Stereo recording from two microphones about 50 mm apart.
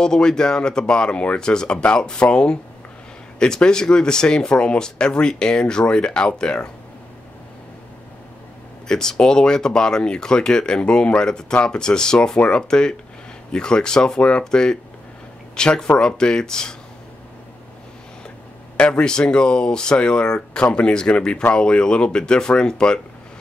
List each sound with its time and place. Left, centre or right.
0.0 s speech: centre
8.8 s speech: centre
18.8 s speech: centre